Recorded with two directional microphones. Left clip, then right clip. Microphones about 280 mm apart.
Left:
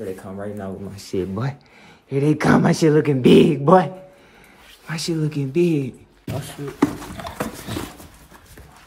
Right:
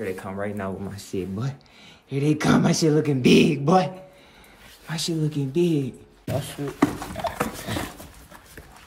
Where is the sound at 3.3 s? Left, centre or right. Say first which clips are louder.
Left 5 dB; left.